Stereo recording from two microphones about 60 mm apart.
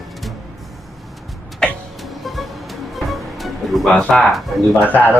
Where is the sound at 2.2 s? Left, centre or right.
Centre.